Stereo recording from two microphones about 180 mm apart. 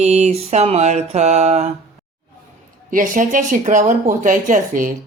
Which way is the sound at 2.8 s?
50° right (ahead or behind).